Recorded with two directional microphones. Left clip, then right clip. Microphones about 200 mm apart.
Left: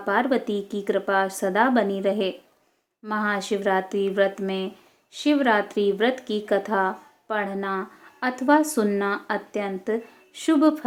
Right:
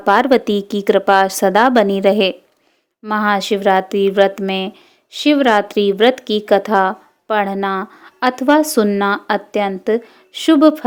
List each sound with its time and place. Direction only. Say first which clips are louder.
0.0 s speech: right 10 dB; 55° right (ahead or behind)